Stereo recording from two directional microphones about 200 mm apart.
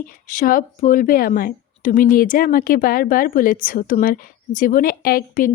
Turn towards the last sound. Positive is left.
turn(degrees=45)  # may be behind; listen again after turning